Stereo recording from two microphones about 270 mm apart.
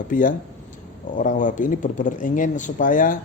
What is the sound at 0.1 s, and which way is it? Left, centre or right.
Speech, left.